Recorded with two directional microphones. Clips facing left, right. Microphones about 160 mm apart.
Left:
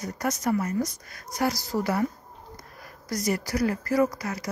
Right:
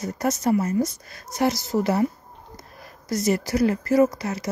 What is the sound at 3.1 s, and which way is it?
Speech, 25° right (ahead or behind).